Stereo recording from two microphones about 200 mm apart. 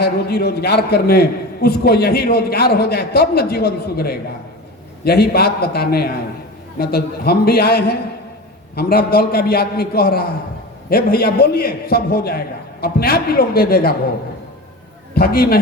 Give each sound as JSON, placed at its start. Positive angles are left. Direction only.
{"t": 0.0, "sound": "a man's voice", "side_deg": 55}
{"t": 15.1, "sound": "a man's voice", "side_deg": 50}